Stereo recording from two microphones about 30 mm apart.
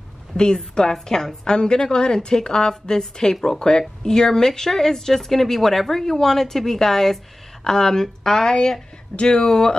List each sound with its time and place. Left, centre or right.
0.3 s speech: left
0.8 s a woman's voice: centre
9.1 s speech: left
9.4 s a woman's voice: left